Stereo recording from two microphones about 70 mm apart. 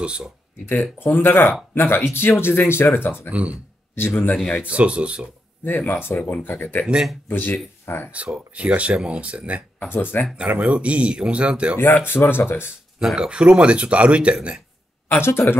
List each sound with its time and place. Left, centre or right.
0.0 s speech: centre
0.7 s speech: left
3.3 s speech: centre
3.9 s speech: left
4.6 s speech: centre
5.9 s speech: left
8.1 s speech: centre
9.8 s speech: left
10.3 s speech: centre
12.1 s speech: left
13.0 s speech: centre
15.0 s speech: left